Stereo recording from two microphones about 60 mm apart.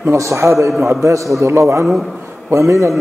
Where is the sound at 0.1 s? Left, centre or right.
Right.